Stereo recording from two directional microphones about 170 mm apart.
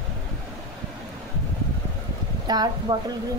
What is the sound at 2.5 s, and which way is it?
Speech, 25° right (ahead or behind).